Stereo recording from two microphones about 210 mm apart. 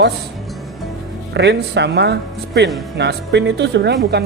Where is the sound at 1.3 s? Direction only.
55° right (ahead or behind).